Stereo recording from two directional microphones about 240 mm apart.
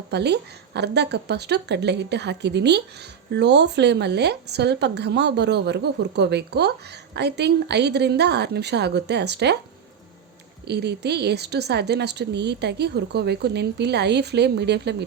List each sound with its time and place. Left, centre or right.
0.1 s a woman's voice: right
10.7 s a woman's voice: right